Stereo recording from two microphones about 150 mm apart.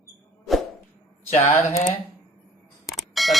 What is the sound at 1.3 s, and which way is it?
Speech, 40° left (ahead or behind).